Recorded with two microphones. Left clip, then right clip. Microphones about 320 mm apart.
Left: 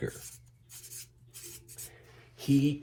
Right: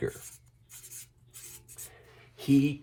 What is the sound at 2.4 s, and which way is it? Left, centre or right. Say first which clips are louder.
Speech: right 2 dB; right.